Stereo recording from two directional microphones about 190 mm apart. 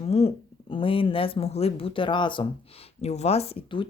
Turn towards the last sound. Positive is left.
turn(degrees=30)  # may be behind; listen again after turning